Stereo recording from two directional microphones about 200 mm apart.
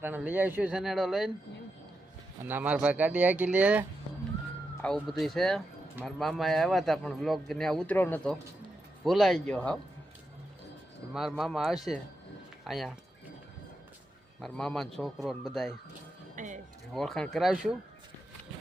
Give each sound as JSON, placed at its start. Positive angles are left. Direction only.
{"t": 0.0, "sound": "a man's voice", "side_deg": -10}
{"t": 2.5, "sound": "speech", "side_deg": -10}
{"t": 4.8, "sound": "a man's voice", "side_deg": 5}
{"t": 11.1, "sound": "a man's voice", "side_deg": 0}
{"t": 14.4, "sound": "a man's voice", "side_deg": 5}
{"t": 16.3, "sound": "music", "side_deg": -40}
{"t": 16.9, "sound": "a man's voice", "side_deg": 0}